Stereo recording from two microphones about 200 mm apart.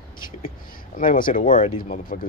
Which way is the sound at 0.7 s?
45° left (ahead or behind).